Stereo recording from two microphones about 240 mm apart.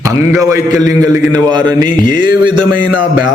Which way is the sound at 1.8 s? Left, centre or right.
Left.